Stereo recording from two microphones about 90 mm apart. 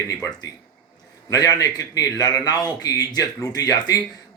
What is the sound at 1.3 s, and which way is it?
A man's voice, 40° left (ahead or behind).